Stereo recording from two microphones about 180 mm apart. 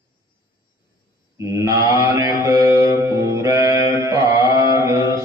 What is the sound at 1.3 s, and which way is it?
Mantra, 15° right (ahead or behind).